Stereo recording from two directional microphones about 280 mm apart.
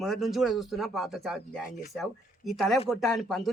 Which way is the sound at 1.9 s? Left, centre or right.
Centre.